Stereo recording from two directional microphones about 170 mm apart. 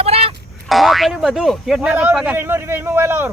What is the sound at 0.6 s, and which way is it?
Speech, centre (ahead or behind).